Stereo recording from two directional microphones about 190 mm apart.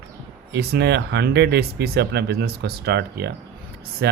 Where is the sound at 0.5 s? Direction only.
60° right (ahead or behind).